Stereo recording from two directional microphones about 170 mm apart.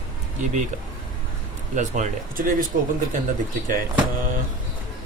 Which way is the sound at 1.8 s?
45° right (ahead or behind).